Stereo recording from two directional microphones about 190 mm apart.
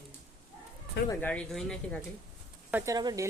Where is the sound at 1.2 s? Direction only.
5° left (ahead or behind).